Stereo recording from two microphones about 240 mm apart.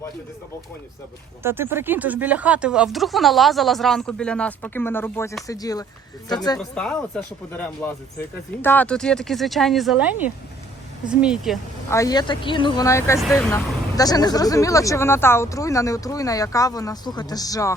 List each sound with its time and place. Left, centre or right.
1.4 s speech: centre
6.6 s speech: centre
8.6 s speech: centre
11.9 s speech: centre